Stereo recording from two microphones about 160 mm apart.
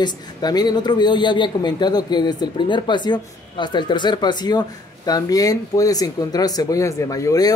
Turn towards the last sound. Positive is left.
turn(degrees=20)  # may be behind; listen again after turning